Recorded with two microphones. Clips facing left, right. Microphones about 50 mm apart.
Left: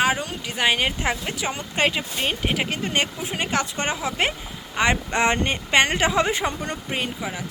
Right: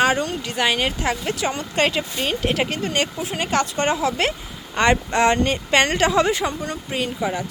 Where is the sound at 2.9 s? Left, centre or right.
Left.